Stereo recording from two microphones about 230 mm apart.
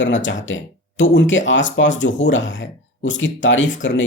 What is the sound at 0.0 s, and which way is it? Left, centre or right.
Speech, left.